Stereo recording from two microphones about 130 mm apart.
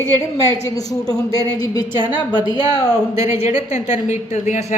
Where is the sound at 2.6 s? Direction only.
40° left (ahead or behind).